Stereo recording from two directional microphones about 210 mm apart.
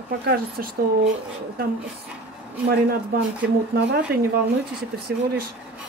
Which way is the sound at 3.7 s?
50° right (ahead or behind).